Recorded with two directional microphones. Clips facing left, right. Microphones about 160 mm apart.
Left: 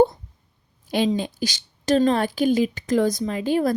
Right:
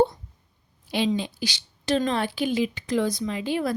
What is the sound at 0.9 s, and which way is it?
A woman's voice, 45° left (ahead or behind).